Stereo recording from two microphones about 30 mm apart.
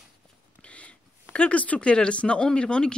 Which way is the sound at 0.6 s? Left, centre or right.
Left.